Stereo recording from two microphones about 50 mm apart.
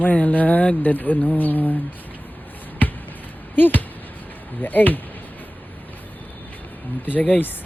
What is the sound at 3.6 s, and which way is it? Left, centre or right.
Speech, left.